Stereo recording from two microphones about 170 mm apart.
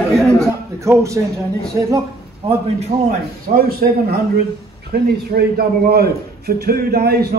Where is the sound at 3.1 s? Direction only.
60° right (ahead or behind).